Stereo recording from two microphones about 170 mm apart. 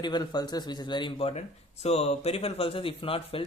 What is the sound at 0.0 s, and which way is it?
Speech, 25° left (ahead or behind).